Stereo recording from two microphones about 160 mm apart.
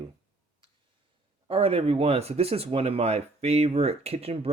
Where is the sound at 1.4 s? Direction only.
35° right (ahead or behind).